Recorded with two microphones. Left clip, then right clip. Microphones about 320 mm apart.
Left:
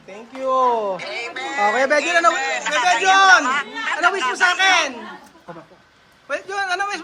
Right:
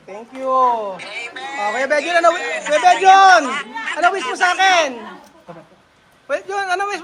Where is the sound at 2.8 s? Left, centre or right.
Centre.